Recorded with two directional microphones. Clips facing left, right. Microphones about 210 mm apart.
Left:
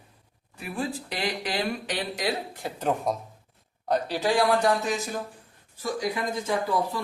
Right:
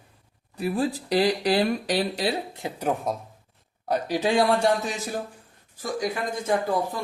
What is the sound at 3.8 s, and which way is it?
Speech, 10° right (ahead or behind).